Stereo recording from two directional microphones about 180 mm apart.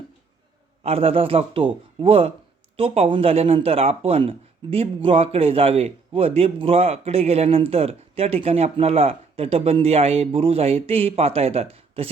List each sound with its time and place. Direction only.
0.8 s a man's voice: 30° right (ahead or behind)